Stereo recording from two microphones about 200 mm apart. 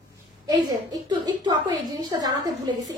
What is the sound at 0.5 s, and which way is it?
A woman's voice, 20° right (ahead or behind).